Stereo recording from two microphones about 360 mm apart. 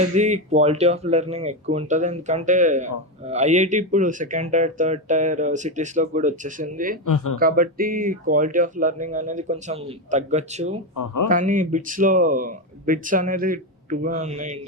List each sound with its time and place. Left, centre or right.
0.2 s a man's voice: centre
7.0 s speech: left
7.3 s a man's voice: right
10.9 s speech: left
11.3 s a man's voice: right